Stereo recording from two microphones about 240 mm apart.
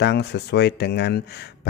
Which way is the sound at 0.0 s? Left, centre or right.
Left.